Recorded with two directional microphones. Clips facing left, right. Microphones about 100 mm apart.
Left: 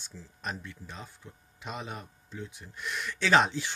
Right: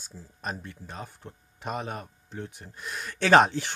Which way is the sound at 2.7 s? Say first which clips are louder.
Left 4 dB; 35° right (ahead or behind).